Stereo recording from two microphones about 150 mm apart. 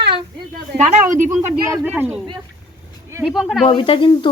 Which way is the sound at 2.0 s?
15° right (ahead or behind).